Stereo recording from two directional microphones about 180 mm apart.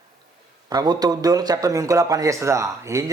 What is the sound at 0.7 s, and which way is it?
Speech, 20° right (ahead or behind).